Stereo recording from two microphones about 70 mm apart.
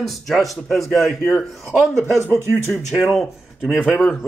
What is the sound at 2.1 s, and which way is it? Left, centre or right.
Speech, right.